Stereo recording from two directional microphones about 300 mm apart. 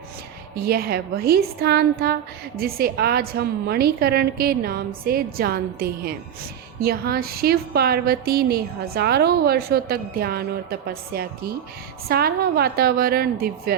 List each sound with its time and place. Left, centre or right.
0.5 s a woman's voice: right